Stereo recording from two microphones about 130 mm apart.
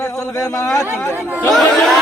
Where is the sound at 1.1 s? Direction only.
10° right (ahead or behind).